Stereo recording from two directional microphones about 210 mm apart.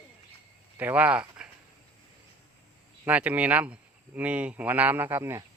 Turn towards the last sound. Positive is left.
turn(degrees=-10)  # may be behind; listen again after turning